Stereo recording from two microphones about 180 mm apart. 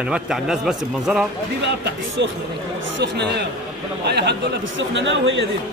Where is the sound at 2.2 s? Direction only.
70° right (ahead or behind).